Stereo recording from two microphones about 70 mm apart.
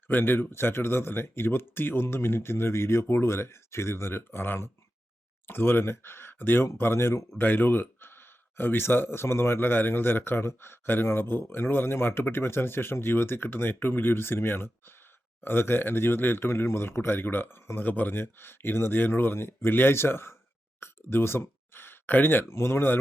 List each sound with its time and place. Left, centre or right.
0.1 s speech: left
20.8 s plop: left
22.5 s speech: left